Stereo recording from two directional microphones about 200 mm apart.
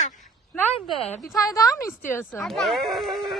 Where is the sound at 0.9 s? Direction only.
30° left (ahead or behind).